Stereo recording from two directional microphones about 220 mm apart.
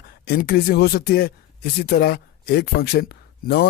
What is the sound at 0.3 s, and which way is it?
Speech, 45° left (ahead or behind).